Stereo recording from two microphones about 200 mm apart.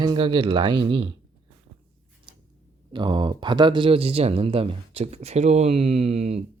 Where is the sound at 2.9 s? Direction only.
20° right (ahead or behind).